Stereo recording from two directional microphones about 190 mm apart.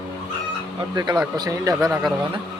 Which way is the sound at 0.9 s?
20° right (ahead or behind).